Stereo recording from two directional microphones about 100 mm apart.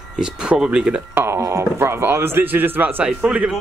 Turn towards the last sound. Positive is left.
turn(degrees=-10)  # may be behind; listen again after turning